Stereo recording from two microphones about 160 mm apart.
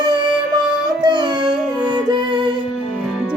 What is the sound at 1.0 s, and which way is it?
Music, 30° right (ahead or behind).